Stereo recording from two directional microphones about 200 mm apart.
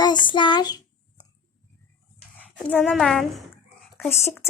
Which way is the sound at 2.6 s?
5° left (ahead or behind).